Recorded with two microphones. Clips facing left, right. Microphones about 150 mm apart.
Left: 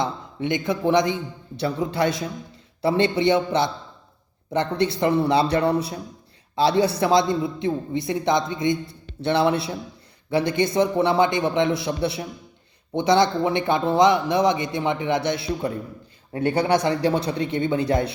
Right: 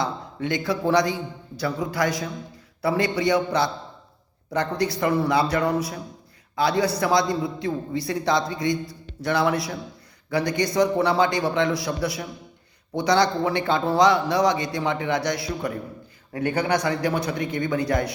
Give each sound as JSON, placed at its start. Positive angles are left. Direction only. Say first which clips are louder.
{"t": 0.0, "sound": "a man's voice", "louder": "left 1 dB", "side_deg": 20}